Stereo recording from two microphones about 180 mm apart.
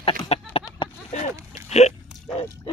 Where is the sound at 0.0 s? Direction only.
30° left (ahead or behind).